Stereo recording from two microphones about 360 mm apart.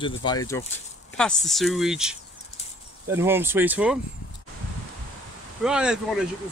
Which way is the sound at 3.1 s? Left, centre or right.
Centre.